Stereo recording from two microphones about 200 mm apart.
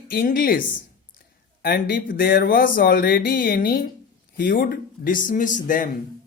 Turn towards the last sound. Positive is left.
turn(degrees=40)  # may be behind; listen again after turning